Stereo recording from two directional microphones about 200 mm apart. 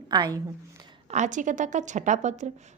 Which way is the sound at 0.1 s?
20° right (ahead or behind).